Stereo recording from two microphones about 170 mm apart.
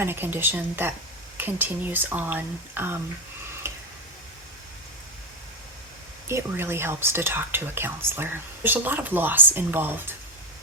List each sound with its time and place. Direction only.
0.0 s speech: 15° right (ahead or behind)
3.6 s tick-tock: 15° right (ahead or behind)
6.2 s speech: 15° right (ahead or behind)